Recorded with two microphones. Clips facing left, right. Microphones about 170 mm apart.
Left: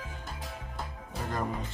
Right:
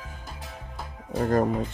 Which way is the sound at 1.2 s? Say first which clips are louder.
Right 12 dB; 50° right (ahead or behind).